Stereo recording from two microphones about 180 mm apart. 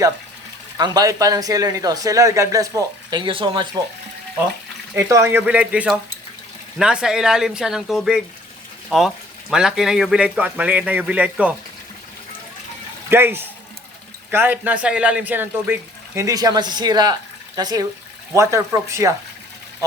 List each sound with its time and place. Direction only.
0.8 s speech: 20° right (ahead or behind)
4.9 s speech: 15° right (ahead or behind)
13.1 s speech: 10° right (ahead or behind)